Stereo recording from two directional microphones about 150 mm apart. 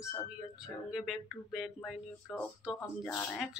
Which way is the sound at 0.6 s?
Centre (ahead or behind).